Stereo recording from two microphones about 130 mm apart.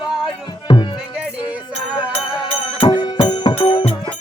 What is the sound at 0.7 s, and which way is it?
Music, 35° left (ahead or behind).